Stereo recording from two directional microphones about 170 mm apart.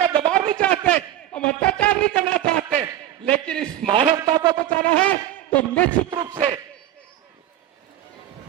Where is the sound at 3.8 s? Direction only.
30° right (ahead or behind).